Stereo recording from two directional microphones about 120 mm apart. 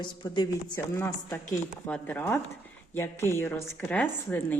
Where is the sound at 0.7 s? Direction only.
20° left (ahead or behind).